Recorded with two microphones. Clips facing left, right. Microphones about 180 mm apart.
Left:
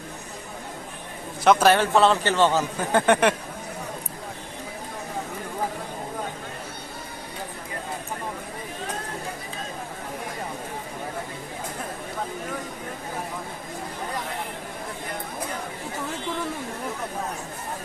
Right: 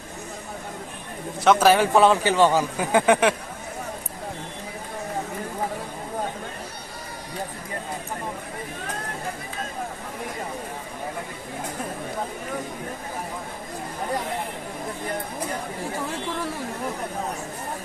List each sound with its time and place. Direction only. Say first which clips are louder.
1.5 s a man's voice: right 1 dB; 5° right (ahead or behind)